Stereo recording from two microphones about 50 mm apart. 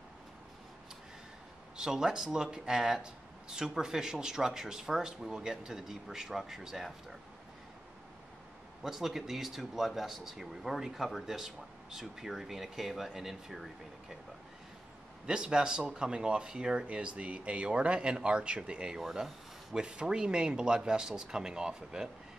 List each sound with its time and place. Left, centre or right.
1.8 s speech: centre
8.8 s speech: centre
15.2 s speech: centre
18.9 s speech: centre